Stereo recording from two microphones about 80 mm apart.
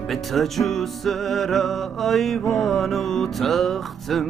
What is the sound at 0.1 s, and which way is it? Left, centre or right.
Music, centre.